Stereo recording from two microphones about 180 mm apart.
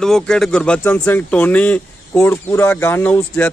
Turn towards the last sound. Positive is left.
turn(degrees=10)  # may be behind; listen again after turning